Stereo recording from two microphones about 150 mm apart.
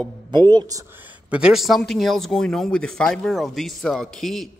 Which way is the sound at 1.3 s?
5° right (ahead or behind).